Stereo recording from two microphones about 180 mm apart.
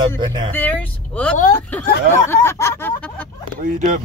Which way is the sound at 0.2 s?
25° right (ahead or behind).